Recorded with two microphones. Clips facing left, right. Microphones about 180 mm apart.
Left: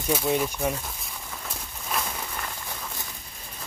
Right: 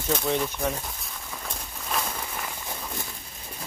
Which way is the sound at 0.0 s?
10° left (ahead or behind).